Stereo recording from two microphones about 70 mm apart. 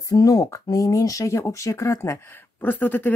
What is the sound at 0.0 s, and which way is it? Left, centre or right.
Speech, left.